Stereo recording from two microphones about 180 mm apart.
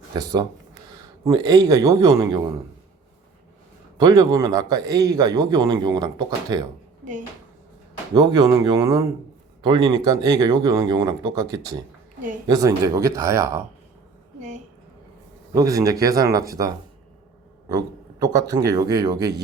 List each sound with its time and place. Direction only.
0.2 s a man's voice: 20° right (ahead or behind)
4.0 s a man's voice: 20° right (ahead or behind)
7.0 s speech: 45° right (ahead or behind)
8.1 s a man's voice: 20° right (ahead or behind)
15.5 s a man's voice: 20° right (ahead or behind)